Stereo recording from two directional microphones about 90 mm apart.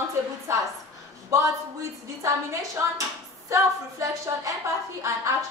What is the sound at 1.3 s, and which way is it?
A woman's voice, 35° right (ahead or behind).